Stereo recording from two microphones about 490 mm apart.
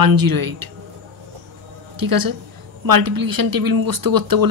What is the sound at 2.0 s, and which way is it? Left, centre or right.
Speech, right.